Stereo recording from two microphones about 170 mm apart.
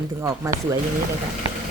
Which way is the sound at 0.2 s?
15° right (ahead or behind).